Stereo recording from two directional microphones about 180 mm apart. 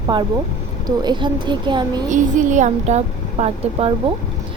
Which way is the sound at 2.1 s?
45° right (ahead or behind).